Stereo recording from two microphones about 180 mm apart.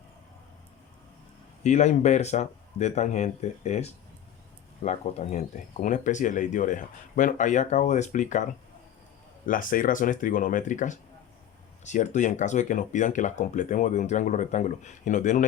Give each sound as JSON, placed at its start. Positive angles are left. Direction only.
{"t": 1.6, "sound": "speech", "side_deg": 40}
{"t": 9.5, "sound": "speech", "side_deg": 50}